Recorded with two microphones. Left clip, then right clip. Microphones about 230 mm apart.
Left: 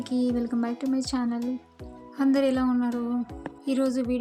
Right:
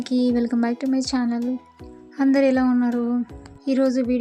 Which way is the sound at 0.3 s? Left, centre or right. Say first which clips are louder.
Right 6 dB; right.